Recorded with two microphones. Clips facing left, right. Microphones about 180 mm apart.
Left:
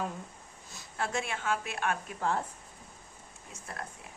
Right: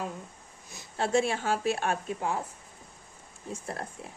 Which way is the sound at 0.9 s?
30° right (ahead or behind).